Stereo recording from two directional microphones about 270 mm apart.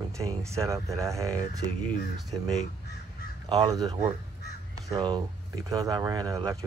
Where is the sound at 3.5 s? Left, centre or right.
Centre.